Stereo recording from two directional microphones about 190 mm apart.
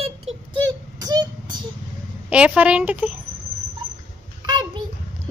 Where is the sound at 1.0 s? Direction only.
20° right (ahead or behind).